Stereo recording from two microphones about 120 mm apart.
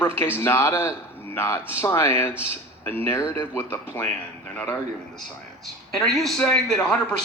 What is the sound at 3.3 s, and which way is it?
Speech, 20° left (ahead or behind).